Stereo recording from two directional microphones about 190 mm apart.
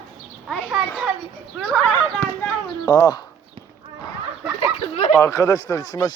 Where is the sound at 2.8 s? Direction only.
20° left (ahead or behind).